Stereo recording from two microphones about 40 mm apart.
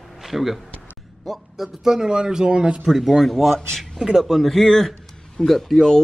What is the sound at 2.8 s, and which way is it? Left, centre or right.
Speech, centre.